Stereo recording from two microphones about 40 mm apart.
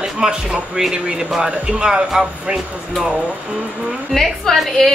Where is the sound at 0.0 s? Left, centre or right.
Centre.